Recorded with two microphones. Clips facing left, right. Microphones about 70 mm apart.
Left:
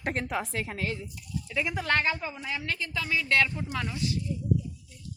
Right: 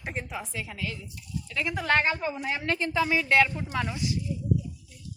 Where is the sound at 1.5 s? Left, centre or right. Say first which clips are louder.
Even; centre.